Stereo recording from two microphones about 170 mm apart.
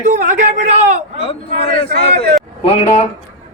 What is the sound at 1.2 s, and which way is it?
A man's voice, 35° left (ahead or behind).